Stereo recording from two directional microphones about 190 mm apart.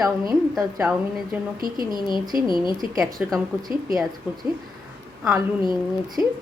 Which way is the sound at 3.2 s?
Centre (ahead or behind).